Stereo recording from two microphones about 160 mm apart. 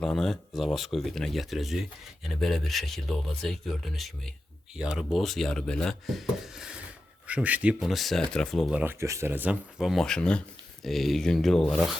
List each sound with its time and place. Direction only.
0.0 s speech: 5° left (ahead or behind)
8.8 s speech: 15° right (ahead or behind); by 11.9 s centre (ahead or behind)